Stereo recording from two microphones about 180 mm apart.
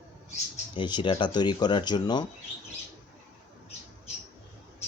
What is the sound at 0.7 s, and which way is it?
Speech, 25° left (ahead or behind).